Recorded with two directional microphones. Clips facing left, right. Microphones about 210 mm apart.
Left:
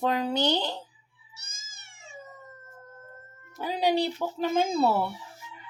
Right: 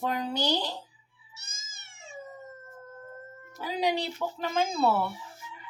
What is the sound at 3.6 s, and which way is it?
Speech, 35° left (ahead or behind).